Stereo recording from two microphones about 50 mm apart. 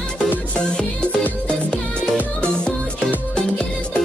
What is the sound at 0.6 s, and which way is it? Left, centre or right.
Music, left.